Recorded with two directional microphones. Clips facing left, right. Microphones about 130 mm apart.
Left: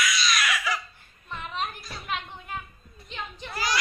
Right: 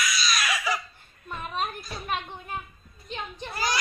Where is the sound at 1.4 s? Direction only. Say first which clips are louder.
Right 2 dB; 45° right (ahead or behind).